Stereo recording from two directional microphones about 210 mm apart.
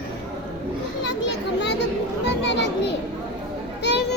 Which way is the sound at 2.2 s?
55° left (ahead or behind).